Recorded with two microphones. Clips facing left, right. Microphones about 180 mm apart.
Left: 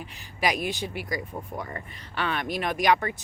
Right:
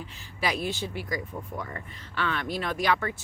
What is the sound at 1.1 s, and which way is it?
Speech, 35° left (ahead or behind).